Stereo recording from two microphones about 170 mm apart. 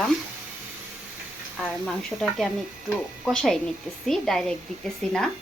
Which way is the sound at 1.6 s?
5° left (ahead or behind).